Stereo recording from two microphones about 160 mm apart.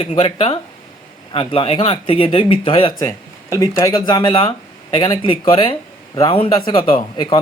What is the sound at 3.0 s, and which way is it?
Speech, 20° left (ahead or behind).